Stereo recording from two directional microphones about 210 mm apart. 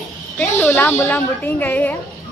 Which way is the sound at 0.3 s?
10° left (ahead or behind).